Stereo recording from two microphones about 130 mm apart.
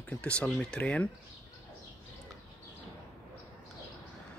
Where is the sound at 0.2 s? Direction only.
10° left (ahead or behind).